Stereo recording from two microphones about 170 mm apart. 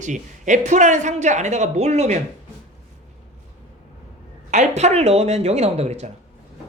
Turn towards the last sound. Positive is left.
turn(degrees=-40)  # may be behind; listen again after turning